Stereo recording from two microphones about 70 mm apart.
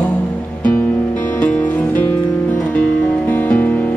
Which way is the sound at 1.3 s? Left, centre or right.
Left.